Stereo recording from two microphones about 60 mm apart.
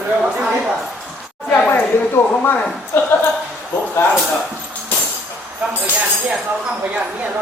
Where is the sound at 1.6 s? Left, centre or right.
Left.